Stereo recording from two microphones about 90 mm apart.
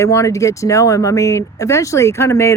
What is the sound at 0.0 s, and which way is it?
Speech, 35° left (ahead or behind).